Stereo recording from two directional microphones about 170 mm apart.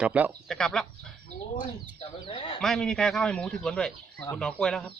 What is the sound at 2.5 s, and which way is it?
Speech, 5° left (ahead or behind).